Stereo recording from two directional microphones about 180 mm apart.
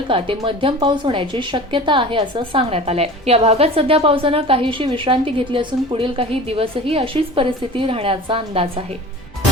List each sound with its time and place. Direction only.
0.1 s speech: 30° right (ahead or behind)